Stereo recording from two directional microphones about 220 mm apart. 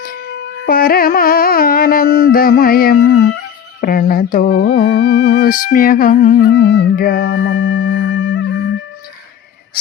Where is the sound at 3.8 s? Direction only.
40° left (ahead or behind).